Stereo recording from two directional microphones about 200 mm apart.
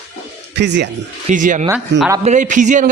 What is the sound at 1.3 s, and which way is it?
A man's voice, 40° right (ahead or behind).